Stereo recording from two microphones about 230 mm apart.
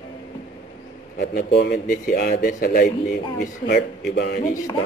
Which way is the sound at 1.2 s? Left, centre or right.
Left.